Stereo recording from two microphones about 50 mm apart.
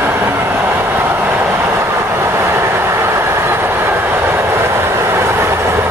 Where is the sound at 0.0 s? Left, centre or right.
Right.